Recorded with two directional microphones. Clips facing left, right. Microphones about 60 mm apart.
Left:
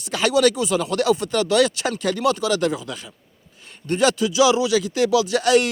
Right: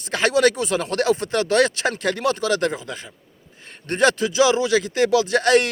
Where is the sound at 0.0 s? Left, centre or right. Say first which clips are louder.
Even; right.